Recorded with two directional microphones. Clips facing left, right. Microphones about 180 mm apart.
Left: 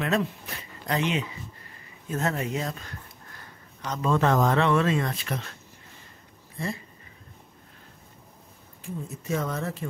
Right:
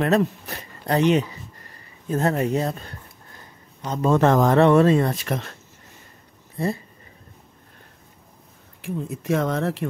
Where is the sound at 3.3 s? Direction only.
25° right (ahead or behind).